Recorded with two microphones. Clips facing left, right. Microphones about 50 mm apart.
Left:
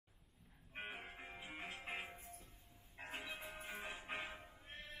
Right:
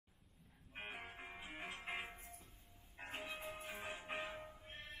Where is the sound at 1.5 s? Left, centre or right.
Right.